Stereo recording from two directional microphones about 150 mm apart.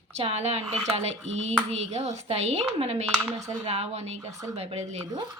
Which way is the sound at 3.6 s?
45° right (ahead or behind).